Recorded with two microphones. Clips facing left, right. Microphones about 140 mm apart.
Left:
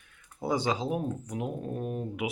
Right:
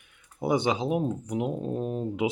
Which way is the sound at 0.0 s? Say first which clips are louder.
Right 4 dB; 20° right (ahead or behind).